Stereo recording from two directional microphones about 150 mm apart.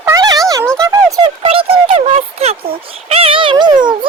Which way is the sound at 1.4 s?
40° right (ahead or behind).